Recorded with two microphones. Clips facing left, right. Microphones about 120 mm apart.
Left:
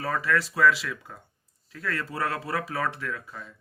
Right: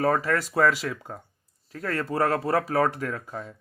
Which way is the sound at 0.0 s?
45° right (ahead or behind).